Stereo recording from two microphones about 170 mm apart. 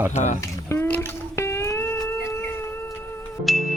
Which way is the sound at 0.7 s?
15° left (ahead or behind).